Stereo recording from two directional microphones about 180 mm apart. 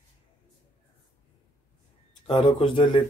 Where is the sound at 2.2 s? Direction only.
25° left (ahead or behind).